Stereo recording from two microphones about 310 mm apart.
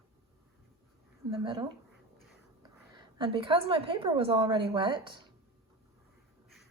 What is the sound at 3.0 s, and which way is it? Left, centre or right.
A woman's voice, centre.